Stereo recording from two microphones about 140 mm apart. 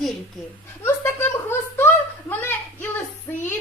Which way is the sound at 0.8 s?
15° left (ahead or behind).